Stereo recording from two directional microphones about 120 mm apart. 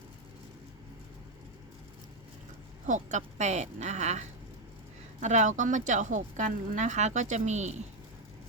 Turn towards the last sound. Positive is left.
turn(degrees=-75)  # may be behind; listen again after turning